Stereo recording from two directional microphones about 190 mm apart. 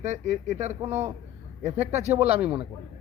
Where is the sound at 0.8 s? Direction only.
15° right (ahead or behind).